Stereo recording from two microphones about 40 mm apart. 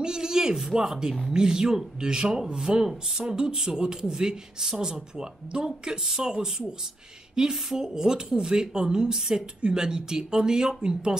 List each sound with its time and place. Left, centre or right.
0.0 s speech: centre
7.5 s speech: centre